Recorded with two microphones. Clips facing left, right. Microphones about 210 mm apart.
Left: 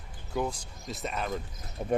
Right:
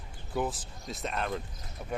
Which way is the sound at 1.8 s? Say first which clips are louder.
Left 8 dB; 30° left (ahead or behind).